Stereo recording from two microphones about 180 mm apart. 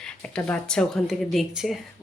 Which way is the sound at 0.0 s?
5° left (ahead or behind).